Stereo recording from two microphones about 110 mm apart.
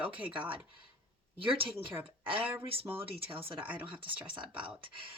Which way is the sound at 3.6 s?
10° right (ahead or behind).